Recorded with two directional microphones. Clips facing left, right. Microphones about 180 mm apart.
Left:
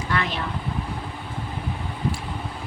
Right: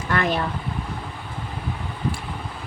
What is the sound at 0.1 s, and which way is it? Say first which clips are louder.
Vehicle: right 4 dB; 50° right (ahead or behind).